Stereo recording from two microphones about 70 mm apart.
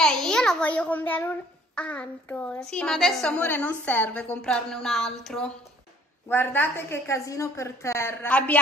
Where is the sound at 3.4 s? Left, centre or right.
Left.